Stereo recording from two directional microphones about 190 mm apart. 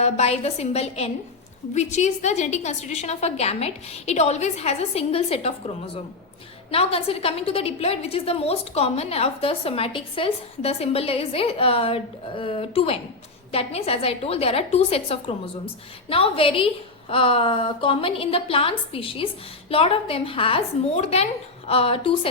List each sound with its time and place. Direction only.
0.0 s a woman's voice: 35° left (ahead or behind)